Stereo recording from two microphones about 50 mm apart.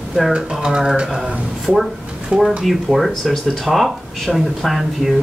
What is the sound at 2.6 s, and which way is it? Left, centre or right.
Speech, centre.